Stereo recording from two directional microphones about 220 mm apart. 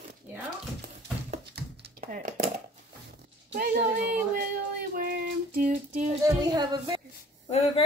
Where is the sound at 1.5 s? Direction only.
40° right (ahead or behind).